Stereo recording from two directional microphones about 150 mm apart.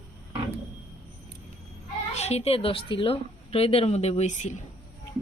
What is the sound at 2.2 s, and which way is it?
A woman's voice, 45° left (ahead or behind).